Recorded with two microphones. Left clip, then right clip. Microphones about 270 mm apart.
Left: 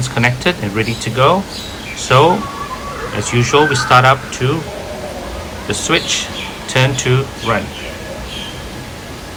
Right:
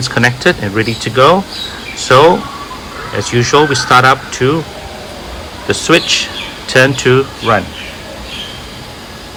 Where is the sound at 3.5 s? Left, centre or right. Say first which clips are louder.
Right 2 dB; centre.